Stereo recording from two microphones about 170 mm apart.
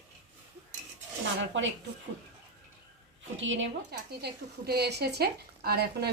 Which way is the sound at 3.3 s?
90° right.